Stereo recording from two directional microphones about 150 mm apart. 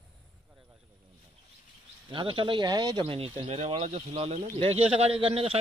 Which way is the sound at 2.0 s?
35° right (ahead or behind).